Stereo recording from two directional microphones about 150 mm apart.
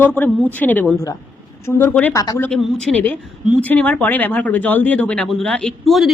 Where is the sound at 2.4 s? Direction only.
5° left (ahead or behind).